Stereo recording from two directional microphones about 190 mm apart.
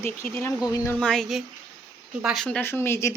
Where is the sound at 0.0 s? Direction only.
10° left (ahead or behind).